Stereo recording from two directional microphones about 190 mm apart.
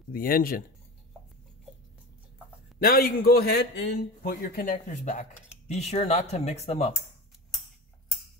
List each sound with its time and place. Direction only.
0.1 s a man's voice: 50° left (ahead or behind)
2.8 s a man's voice: 50° left (ahead or behind)